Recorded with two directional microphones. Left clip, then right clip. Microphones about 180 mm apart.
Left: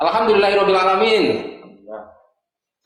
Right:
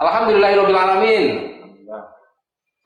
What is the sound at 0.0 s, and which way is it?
A man's voice, 40° left (ahead or behind).